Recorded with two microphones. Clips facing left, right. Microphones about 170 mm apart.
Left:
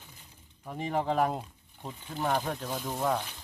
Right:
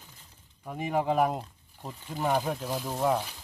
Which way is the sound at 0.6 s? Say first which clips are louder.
Right 2 dB; 5° right (ahead or behind).